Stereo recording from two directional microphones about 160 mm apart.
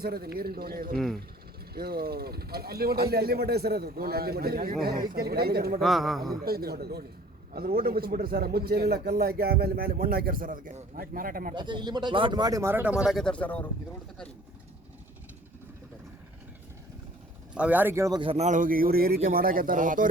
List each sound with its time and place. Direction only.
0.0 s speech: 75° right (ahead or behind)
0.9 s a man's voice: 5° left (ahead or behind)
1.7 s speech: 75° right (ahead or behind)
5.8 s a man's voice: centre (ahead or behind)
6.4 s speech: 75° right (ahead or behind)
7.5 s speech: 70° right (ahead or behind)
11.5 s speech: 30° right (ahead or behind); by 13.7 s 10° left (ahead or behind)
17.5 s speech: 10° right (ahead or behind)
18.2 s speech: 35° right (ahead or behind)
18.4 s a man's voice: 55° right (ahead or behind)